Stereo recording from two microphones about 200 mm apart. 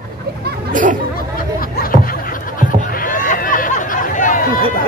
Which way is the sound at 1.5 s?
45° left (ahead or behind).